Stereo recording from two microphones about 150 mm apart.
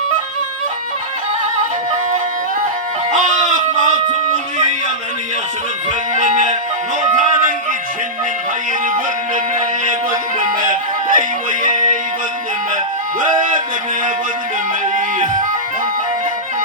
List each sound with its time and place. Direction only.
3.1 s a sound: 55° right (ahead or behind)
6.1 s music: 55° right (ahead or behind)
10.4 s music: 65° right (ahead or behind)
13.2 s music: 65° right (ahead or behind)
14.9 s music: 60° right (ahead or behind)